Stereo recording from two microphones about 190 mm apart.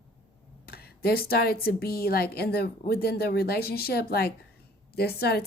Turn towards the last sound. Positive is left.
turn(degrees=55)  # may be behind; listen again after turning